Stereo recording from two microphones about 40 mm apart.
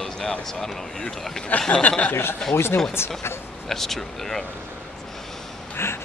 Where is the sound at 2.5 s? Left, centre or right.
Left.